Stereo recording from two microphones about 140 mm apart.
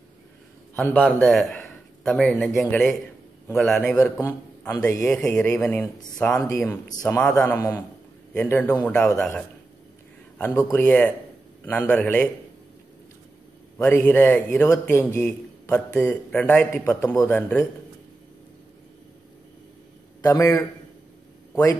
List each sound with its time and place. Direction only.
0.7 s a man's voice: 10° left (ahead or behind)
4.2 s a man's voice: 20° left (ahead or behind)
5.1 s a man's voice: 5° left (ahead or behind)
6.4 s speech: 20° left (ahead or behind)
7.2 s a man's voice: 5° left (ahead or behind)
7.5 s a man's voice: 20° left (ahead or behind)
10.3 s a man's voice: 20° left (ahead or behind)
13.7 s a man's voice: 15° left (ahead or behind)
20.2 s speech: 20° left (ahead or behind)